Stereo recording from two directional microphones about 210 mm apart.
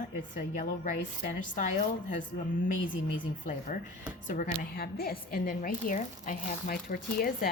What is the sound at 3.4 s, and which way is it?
Speech, 35° left (ahead or behind).